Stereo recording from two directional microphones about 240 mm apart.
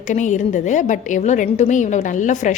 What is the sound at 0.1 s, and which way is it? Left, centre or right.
A woman's voice, left.